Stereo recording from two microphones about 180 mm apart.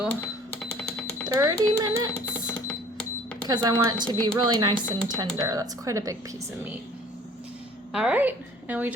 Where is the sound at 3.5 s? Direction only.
20° right (ahead or behind).